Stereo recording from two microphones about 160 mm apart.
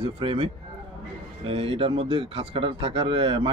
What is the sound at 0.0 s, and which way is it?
Speech, 35° right (ahead or behind).